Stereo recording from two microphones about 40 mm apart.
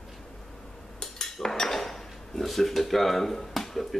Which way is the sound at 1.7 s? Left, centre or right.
Centre.